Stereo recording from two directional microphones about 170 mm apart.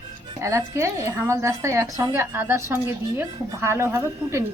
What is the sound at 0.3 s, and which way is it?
Speech, 15° right (ahead or behind).